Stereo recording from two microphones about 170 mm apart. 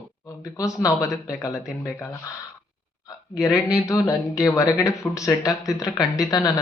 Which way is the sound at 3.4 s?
20° left (ahead or behind).